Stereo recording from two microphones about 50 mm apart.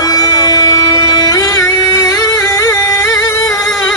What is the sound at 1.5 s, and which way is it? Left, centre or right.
Music, left.